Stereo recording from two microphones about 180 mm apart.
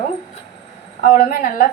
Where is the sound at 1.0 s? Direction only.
45° left (ahead or behind).